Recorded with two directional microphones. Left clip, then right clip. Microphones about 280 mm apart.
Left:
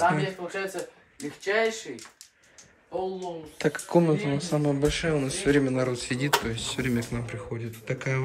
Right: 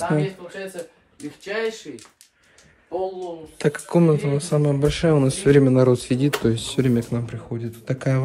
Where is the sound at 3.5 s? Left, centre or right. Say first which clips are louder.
Right 3 dB; centre.